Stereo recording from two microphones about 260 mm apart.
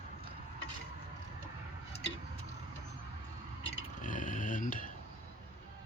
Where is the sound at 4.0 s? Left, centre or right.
Left.